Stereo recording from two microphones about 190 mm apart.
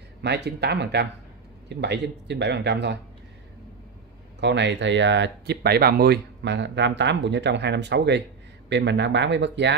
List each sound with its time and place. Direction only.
0.2 s speech: 60° right (ahead or behind)
4.4 s speech: 65° right (ahead or behind)